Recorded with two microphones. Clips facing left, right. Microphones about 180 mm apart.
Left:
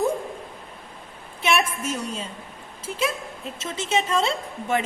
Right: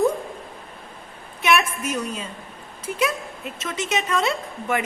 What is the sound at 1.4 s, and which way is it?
A woman's voice, 25° left (ahead or behind).